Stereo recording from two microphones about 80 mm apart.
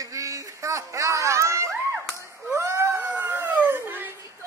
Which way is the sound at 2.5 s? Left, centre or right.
Right.